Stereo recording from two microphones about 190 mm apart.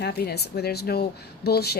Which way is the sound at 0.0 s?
55° left (ahead or behind).